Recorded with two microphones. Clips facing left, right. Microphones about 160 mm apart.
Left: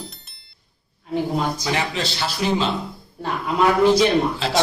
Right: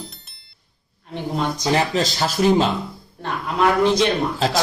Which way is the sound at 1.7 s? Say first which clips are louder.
Right 5 dB; 40° right (ahead or behind).